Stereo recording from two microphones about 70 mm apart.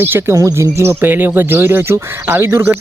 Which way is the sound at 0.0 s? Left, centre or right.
Right.